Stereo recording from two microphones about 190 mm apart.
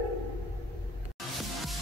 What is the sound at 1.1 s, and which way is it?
Music, centre (ahead or behind).